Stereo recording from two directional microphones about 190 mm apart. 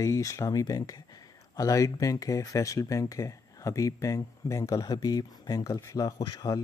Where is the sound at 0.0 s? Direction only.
15° left (ahead or behind).